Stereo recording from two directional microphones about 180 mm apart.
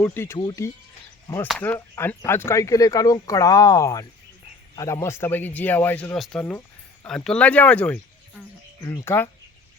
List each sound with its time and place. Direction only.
0.0 s speech: 10° left (ahead or behind)
1.5 s speech: 5° left (ahead or behind)